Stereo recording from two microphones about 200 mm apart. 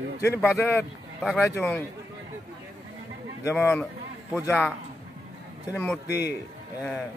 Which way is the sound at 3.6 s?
5° left (ahead or behind).